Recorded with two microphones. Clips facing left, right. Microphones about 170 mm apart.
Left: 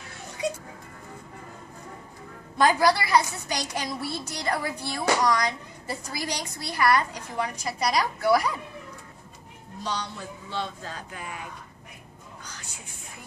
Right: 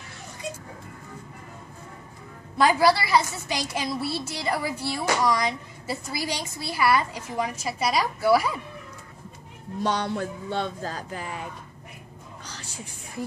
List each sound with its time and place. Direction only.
2.5 s a woman's voice: 5° right (ahead or behind)
9.8 s speech: 55° right (ahead or behind); by 11.4 s 35° right (ahead or behind)
12.4 s a sound: 30° right (ahead or behind)